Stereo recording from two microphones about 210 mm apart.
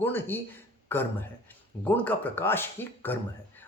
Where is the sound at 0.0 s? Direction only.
10° left (ahead or behind).